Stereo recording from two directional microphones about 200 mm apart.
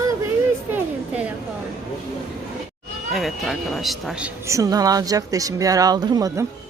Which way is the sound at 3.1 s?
Centre (ahead or behind).